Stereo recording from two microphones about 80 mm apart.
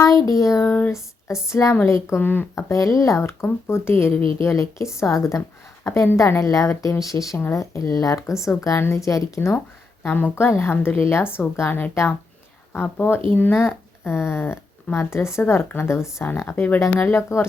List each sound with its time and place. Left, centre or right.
0.0 s speech: left
0.9 s a sound: centre
1.5 s speech: left
2.1 s speech: left
2.6 s speech: left
10.0 s speech: left